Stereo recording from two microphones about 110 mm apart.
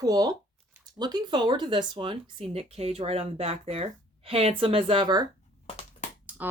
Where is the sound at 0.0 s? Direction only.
35° right (ahead or behind); by 5.0 s 55° right (ahead or behind).